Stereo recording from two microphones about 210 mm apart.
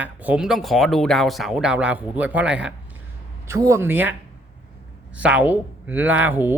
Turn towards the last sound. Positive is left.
turn(degrees=-10)  # may be behind; listen again after turning